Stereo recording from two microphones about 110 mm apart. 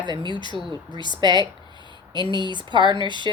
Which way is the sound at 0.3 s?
45° left (ahead or behind).